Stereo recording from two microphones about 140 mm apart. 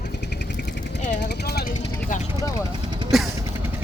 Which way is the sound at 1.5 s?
80° left.